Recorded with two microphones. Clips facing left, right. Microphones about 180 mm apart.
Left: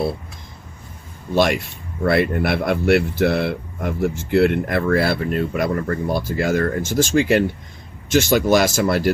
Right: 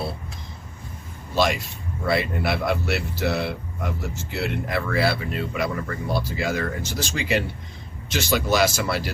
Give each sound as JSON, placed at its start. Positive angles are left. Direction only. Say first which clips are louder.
{"t": 2.0, "sound": "speech", "louder": "left 6 dB", "side_deg": 55}